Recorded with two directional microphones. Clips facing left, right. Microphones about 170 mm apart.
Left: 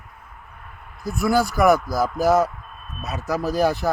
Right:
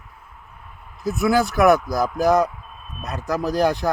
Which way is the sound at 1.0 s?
Centre (ahead or behind).